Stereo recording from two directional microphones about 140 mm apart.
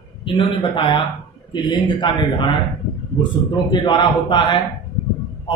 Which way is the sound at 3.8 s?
35° left (ahead or behind).